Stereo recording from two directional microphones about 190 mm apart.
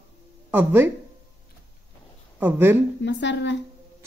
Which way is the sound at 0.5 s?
10° right (ahead or behind).